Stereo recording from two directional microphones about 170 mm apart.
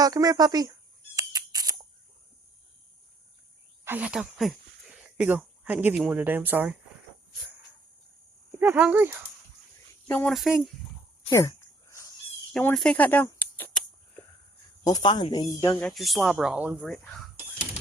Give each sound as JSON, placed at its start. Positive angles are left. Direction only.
{"t": 0.0, "sound": "a sound", "side_deg": -20}
{"t": 3.8, "sound": "speech", "side_deg": -10}
{"t": 8.5, "sound": "speech", "side_deg": -10}
{"t": 10.1, "sound": "speech", "side_deg": 10}
{"t": 10.3, "sound": "speech", "side_deg": 0}
{"t": 11.3, "sound": "a sound", "side_deg": 15}
{"t": 12.5, "sound": "a sound", "side_deg": 5}
{"t": 15.0, "sound": "speech", "side_deg": 25}
{"t": 15.8, "sound": "speech", "side_deg": 0}